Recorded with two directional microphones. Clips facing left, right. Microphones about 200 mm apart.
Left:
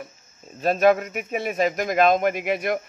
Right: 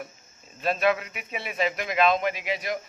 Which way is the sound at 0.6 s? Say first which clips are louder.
Left 6 dB; 45° left (ahead or behind).